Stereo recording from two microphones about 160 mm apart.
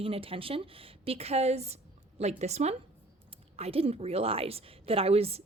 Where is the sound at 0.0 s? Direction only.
35° right (ahead or behind).